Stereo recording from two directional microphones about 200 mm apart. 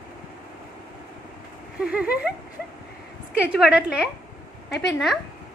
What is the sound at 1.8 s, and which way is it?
Speech, 5° right (ahead or behind).